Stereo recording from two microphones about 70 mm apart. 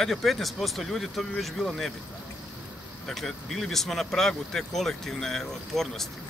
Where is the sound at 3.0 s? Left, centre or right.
Centre.